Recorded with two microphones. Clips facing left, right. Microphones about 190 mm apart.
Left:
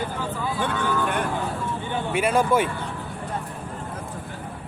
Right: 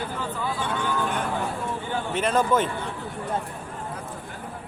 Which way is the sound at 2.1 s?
10° left (ahead or behind).